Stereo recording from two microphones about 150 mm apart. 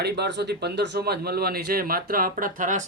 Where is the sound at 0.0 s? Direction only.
90° right.